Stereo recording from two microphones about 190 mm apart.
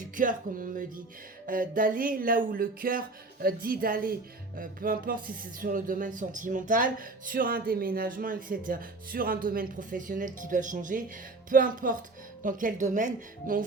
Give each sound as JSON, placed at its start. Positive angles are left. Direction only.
{"t": 0.2, "sound": "speech", "side_deg": -45}